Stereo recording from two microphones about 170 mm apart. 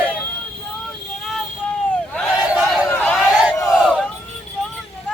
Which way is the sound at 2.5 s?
5° right (ahead or behind).